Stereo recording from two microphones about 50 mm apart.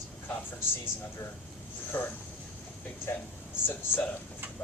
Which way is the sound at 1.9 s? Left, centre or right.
Left.